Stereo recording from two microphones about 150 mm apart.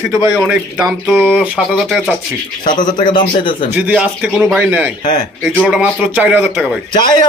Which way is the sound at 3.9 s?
10° right (ahead or behind).